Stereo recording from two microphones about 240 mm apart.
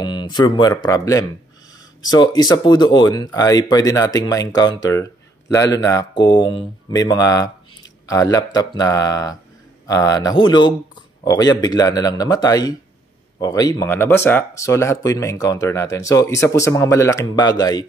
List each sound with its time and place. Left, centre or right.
0.0 s speech: centre